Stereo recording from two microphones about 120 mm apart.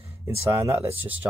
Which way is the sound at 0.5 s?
25° right (ahead or behind).